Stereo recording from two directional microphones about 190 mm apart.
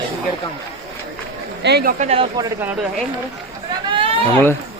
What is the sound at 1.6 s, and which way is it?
Speech, 55° right (ahead or behind).